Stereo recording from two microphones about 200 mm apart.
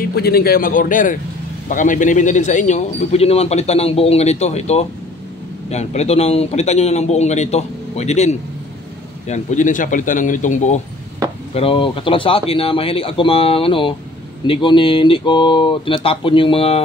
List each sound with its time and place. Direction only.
0.0 s speech: 50° left (ahead or behind)
11.5 s speech: 25° left (ahead or behind)